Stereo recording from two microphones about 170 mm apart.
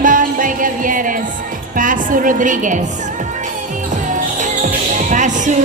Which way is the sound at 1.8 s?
50° right (ahead or behind).